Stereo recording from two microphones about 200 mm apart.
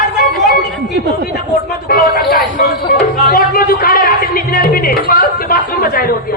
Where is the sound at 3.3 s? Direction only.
45° left (ahead or behind).